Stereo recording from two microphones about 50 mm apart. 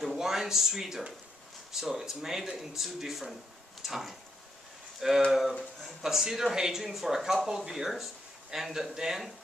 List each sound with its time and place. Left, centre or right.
0.0 s speech: centre
3.8 s a sound: centre
5.3 s speech: centre